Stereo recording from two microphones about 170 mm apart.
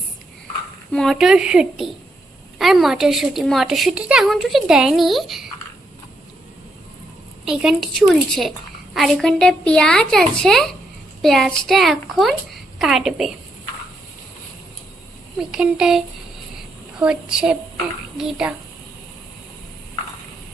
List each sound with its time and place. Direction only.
0.9 s a woman's voice: centre (ahead or behind)
7.4 s a woman's voice: 5° right (ahead or behind)
15.4 s a woman's voice: 5° right (ahead or behind)